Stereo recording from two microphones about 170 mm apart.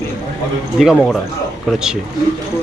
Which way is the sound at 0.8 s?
Centre (ahead or behind).